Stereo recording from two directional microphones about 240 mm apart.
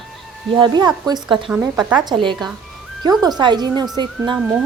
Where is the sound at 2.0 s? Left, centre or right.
Centre.